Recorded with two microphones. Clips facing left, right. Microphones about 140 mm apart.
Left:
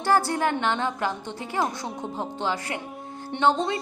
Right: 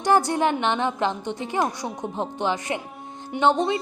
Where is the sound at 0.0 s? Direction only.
20° right (ahead or behind).